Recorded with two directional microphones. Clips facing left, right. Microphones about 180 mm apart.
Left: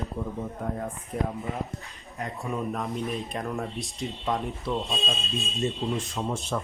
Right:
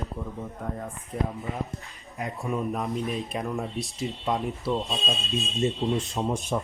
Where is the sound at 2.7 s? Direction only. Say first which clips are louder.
Right 1 dB; centre (ahead or behind).